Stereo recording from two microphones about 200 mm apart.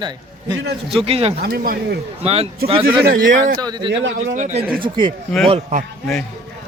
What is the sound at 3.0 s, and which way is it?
Speech, 55° right (ahead or behind).